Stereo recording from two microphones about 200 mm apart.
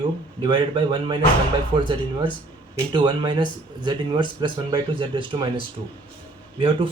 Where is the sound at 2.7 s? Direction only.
20° right (ahead or behind).